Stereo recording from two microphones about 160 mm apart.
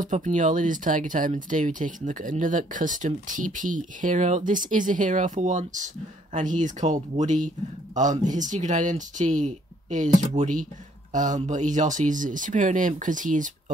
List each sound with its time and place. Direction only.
0.0 s speech: 50° right (ahead or behind)